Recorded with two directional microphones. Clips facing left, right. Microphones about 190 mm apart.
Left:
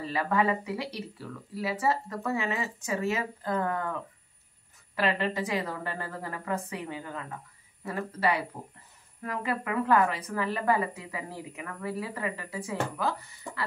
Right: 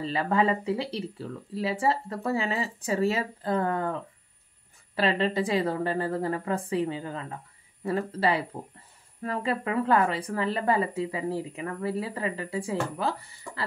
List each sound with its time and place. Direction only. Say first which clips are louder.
0.0 s speech: right 2 dB; 30° right (ahead or behind)